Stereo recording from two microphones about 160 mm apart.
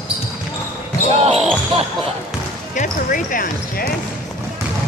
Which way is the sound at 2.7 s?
55° left (ahead or behind).